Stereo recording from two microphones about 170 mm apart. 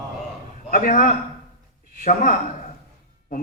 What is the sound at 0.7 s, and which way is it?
Speech, 55° left (ahead or behind).